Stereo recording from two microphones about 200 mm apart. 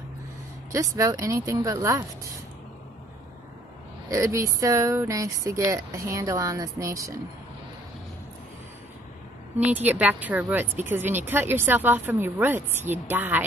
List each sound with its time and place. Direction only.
0.7 s speech: 15° right (ahead or behind)
4.1 s speech: 15° right (ahead or behind)
9.6 s speech: 10° right (ahead or behind)